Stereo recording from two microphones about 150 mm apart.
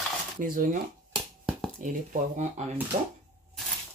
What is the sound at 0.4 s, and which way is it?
Speech, 65° right (ahead or behind).